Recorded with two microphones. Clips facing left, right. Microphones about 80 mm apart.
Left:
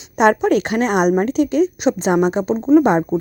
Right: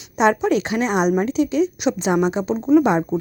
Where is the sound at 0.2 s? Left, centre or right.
Left.